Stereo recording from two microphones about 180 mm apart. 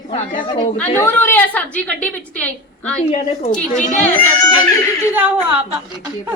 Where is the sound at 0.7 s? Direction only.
10° left (ahead or behind).